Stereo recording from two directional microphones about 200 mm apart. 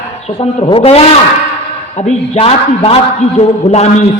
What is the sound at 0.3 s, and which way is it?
A man's voice, 25° left (ahead or behind).